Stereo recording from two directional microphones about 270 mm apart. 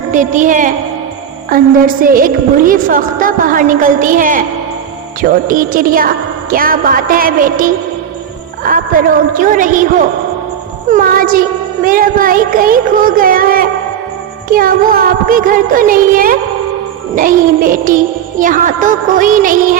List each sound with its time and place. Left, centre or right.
0.1 s music: right
1.5 s a woman's voice: right
8.6 s music: right
10.8 s a woman's voice: right
17.2 s music: right